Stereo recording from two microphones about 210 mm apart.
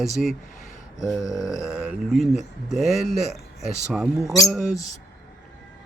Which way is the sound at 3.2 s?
30° right (ahead or behind).